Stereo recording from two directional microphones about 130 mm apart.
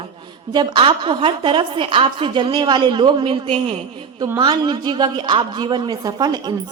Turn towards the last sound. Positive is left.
turn(degrees=-30)  # may be behind; listen again after turning